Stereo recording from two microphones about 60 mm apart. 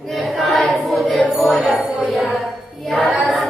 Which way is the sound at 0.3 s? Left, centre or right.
Centre.